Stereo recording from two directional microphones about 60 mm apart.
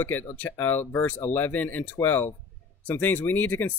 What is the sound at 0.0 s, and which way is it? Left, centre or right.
Speech, left.